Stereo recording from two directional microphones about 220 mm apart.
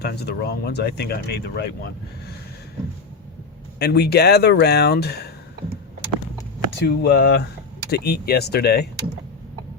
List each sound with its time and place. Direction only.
0.0 s speech: 45° left (ahead or behind)
3.8 s speech: 45° left (ahead or behind)
6.8 s speech: 50° left (ahead or behind)